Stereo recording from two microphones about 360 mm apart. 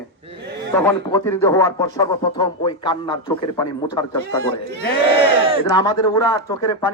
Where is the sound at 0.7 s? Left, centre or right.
Centre.